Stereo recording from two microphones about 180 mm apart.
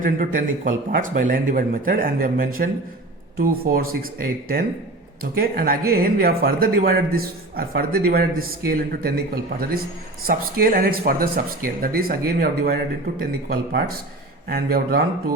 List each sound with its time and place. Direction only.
0.0 s a man's voice: 50° right (ahead or behind)